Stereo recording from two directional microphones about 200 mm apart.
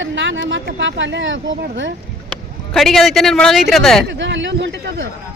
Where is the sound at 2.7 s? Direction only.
Centre (ahead or behind).